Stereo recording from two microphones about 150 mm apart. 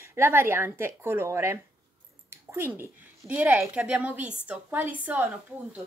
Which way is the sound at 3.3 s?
15° right (ahead or behind).